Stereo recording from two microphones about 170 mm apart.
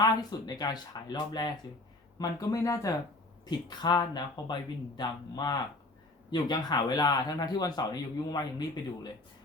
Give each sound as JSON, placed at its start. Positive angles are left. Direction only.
{"t": 0.0, "sound": "speech", "side_deg": 25}